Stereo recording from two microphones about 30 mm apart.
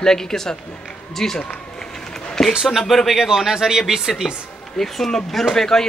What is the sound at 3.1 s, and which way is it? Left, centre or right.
Speech, centre.